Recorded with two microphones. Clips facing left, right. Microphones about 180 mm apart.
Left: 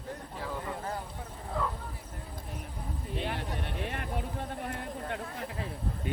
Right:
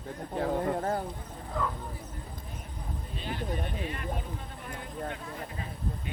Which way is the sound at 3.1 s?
70° left (ahead or behind).